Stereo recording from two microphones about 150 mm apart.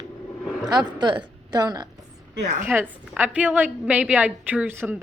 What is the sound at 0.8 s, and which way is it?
Speech, 30° right (ahead or behind).